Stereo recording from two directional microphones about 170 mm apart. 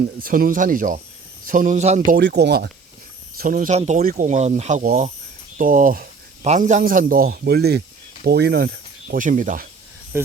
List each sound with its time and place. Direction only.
0.2 s speech: 55° right (ahead or behind)
2.1 s speech: 80° right
3.3 s speech: 55° right (ahead or behind)
3.7 s speech: 40° right (ahead or behind)
5.5 s a sound: 50° right (ahead or behind)
6.5 s speech: 45° right (ahead or behind)
10.1 s speech: 15° right (ahead or behind)